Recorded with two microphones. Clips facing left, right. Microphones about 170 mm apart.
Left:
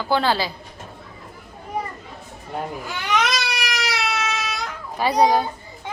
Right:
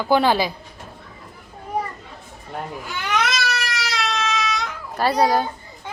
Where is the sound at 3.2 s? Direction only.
15° left (ahead or behind).